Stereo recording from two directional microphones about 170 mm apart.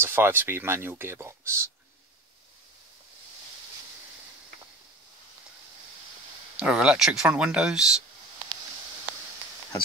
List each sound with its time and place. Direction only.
0.0 s speech: 15° right (ahead or behind)
6.6 s speech: 5° right (ahead or behind)